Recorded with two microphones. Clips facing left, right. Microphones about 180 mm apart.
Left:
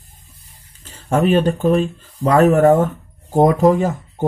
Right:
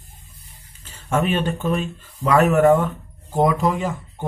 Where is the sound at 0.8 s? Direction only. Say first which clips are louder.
Left 5 dB; 35° left (ahead or behind).